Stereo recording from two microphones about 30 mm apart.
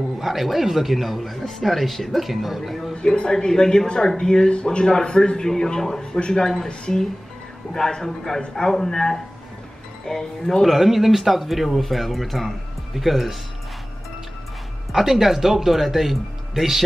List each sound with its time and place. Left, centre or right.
0.2 s speech: centre
2.9 s a man's voice: left
7.7 s a man's voice: centre
10.6 s speech: centre
15.0 s speech: centre